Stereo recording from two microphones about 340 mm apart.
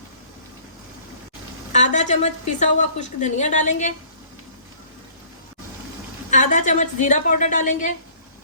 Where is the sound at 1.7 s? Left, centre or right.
Left.